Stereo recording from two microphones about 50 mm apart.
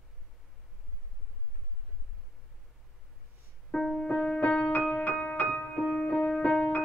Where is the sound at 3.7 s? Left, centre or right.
Centre.